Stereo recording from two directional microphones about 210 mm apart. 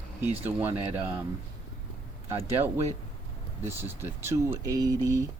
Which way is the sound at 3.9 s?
10° right (ahead or behind).